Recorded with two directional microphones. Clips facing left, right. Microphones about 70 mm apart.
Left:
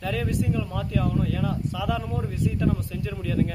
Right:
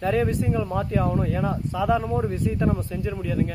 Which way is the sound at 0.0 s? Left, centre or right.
Right.